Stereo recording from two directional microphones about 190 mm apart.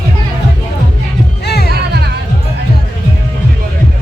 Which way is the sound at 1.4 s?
60° left (ahead or behind).